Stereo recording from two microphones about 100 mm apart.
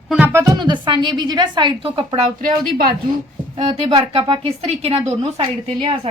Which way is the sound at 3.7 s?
70° right (ahead or behind).